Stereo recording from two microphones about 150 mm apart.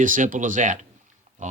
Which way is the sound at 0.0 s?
60° right (ahead or behind).